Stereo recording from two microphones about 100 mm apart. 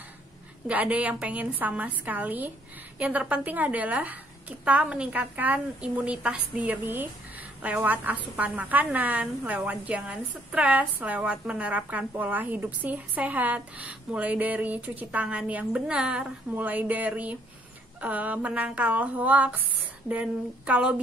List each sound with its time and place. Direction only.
0.7 s a woman's voice: 15° right (ahead or behind)